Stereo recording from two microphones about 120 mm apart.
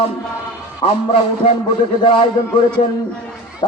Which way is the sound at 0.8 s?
55° left (ahead or behind).